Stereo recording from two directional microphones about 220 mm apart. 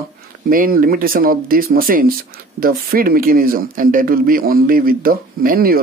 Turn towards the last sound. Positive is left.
turn(degrees=-40)  # may be behind; listen again after turning